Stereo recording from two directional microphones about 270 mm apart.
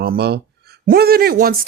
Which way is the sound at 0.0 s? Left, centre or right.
Right.